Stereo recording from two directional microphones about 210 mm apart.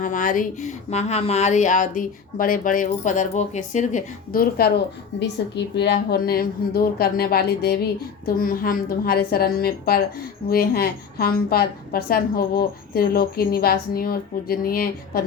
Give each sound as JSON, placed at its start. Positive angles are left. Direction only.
{"t": 0.0, "sound": "a woman's voice", "side_deg": 40}